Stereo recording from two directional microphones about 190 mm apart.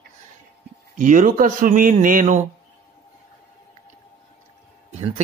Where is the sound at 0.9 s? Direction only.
45° right (ahead or behind).